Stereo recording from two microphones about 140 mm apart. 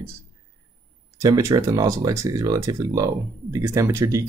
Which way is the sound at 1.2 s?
25° right (ahead or behind).